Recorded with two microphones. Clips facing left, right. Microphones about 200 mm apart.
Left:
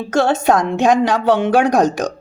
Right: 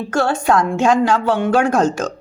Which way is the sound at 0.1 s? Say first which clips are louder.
Left 2 dB; 20° left (ahead or behind).